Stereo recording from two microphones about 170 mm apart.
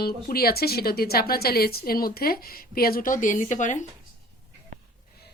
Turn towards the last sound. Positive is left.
turn(degrees=45)  # may be behind; listen again after turning